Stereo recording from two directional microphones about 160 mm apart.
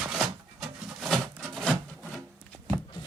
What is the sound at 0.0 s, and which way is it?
Wood, centre (ahead or behind).